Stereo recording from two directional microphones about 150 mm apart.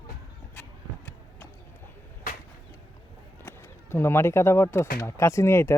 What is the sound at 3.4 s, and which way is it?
Speech, 15° left (ahead or behind).